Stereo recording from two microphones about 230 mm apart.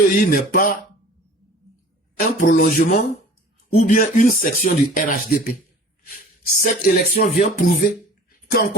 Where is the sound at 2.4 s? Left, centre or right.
Left.